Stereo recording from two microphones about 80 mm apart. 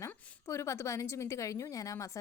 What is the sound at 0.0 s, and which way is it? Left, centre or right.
A woman's voice, left.